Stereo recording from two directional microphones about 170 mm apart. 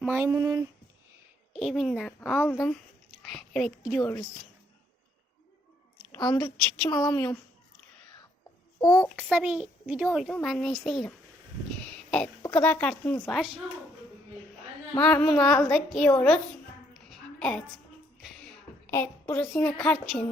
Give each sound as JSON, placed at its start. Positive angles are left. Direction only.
{"t": 0.0, "sound": "speech", "side_deg": -10}
{"t": 1.5, "sound": "a woman's voice", "side_deg": 0}
{"t": 4.0, "sound": "a woman's voice", "side_deg": 20}
{"t": 6.1, "sound": "a woman's voice", "side_deg": 25}
{"t": 8.8, "sound": "a child's voice", "side_deg": 25}
{"t": 9.3, "sound": "a woman's voice", "side_deg": -5}
{"t": 11.9, "sound": "a sound", "side_deg": 5}
{"t": 12.4, "sound": "a sound", "side_deg": 20}
{"t": 12.6, "sound": "a woman's voice", "side_deg": 10}
{"t": 14.9, "sound": "a woman's voice", "side_deg": 5}
{"t": 16.9, "sound": "a sound", "side_deg": 5}
{"t": 18.9, "sound": "a woman's voice", "side_deg": 15}